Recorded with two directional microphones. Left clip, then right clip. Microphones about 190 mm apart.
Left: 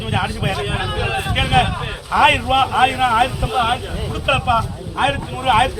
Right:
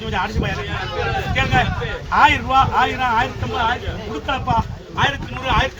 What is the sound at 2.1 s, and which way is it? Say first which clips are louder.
A man's voice: even; 5° right (ahead or behind).